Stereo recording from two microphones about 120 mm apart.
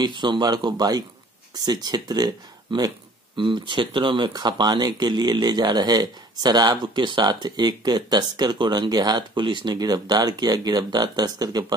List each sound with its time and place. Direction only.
0.0 s speech: 40° right (ahead or behind)